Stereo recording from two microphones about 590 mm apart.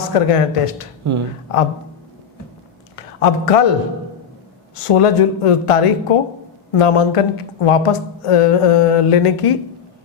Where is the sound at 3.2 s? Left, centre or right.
Left.